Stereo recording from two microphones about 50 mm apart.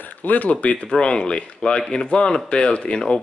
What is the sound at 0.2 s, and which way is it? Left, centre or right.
Speech, left.